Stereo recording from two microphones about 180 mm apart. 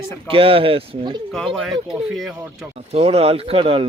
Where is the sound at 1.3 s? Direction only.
Centre (ahead or behind).